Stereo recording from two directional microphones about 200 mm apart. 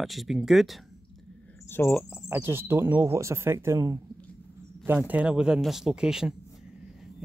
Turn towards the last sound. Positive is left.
turn(degrees=-5)  # may be behind; listen again after turning